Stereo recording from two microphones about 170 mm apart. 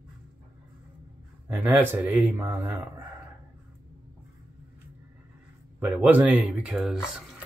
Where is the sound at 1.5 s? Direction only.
10° right (ahead or behind).